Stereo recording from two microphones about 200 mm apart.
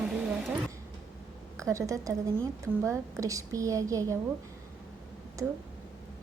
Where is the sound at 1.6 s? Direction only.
15° right (ahead or behind).